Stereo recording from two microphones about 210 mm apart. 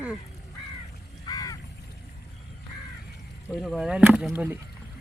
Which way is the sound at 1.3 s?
15° left (ahead or behind).